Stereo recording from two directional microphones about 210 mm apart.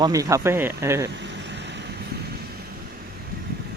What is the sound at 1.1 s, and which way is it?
Vehicle, 55° right (ahead or behind).